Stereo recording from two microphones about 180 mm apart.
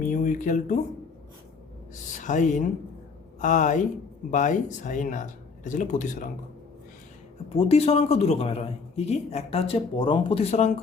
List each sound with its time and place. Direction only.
0.0 s a sound: 45° left (ahead or behind)
2.1 s speech: 45° left (ahead or behind)
7.5 s speech: 35° left (ahead or behind)